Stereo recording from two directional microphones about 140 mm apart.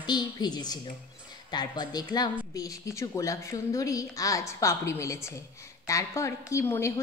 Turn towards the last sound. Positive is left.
turn(degrees=20)  # may be behind; listen again after turning